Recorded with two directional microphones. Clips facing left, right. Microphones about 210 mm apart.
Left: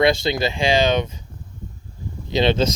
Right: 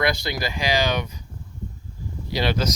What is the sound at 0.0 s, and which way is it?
Speech, 25° left (ahead or behind).